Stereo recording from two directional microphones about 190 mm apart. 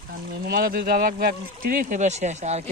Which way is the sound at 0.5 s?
50° right (ahead or behind).